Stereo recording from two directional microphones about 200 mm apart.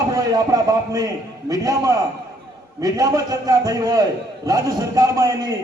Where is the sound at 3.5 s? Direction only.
15° right (ahead or behind).